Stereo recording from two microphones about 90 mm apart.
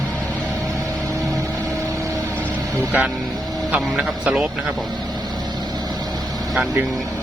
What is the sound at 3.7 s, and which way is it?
Speech, 15° right (ahead or behind).